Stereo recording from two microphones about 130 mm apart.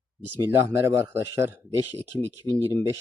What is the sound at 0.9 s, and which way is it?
Speech, 20° right (ahead or behind).